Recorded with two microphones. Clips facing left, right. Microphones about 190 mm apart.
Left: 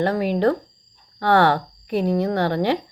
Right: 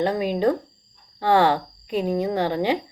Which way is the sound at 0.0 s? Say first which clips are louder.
Left 2 dB; 15° right (ahead or behind).